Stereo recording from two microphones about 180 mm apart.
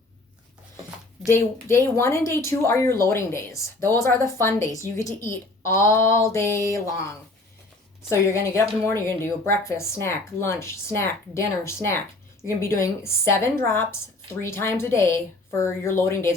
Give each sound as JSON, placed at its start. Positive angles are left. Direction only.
{"t": 1.3, "sound": "a woman's voice", "side_deg": 15}
{"t": 8.3, "sound": "a woman's voice", "side_deg": 15}